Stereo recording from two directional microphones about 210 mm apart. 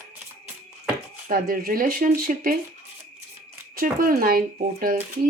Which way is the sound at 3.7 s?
40° right (ahead or behind).